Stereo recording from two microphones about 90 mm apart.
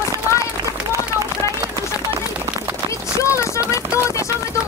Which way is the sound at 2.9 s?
35° left (ahead or behind).